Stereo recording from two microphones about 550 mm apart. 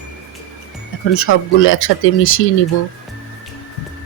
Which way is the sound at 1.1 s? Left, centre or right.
Left.